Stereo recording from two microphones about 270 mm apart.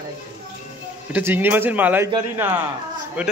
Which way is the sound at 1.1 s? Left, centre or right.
Centre.